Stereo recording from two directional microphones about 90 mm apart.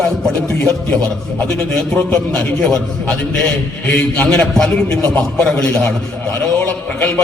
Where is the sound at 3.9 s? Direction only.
20° left (ahead or behind).